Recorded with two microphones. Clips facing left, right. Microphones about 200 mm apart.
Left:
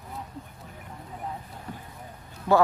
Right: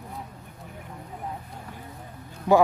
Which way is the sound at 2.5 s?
15° right (ahead or behind).